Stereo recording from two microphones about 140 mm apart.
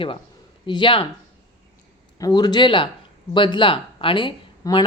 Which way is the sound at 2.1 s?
30° left (ahead or behind).